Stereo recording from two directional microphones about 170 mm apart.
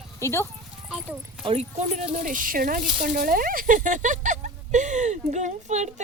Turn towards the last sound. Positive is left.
turn(degrees=-45)  # may be behind; listen again after turning